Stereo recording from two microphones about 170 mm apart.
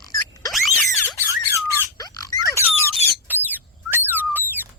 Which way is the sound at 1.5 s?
15° right (ahead or behind).